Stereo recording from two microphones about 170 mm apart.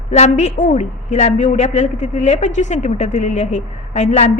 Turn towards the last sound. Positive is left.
turn(degrees=40)  # may be behind; listen again after turning